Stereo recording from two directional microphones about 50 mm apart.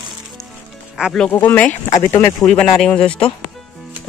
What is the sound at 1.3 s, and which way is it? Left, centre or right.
Speech, left.